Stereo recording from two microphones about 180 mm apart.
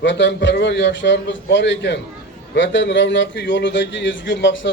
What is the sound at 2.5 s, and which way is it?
A man's voice, 90° left.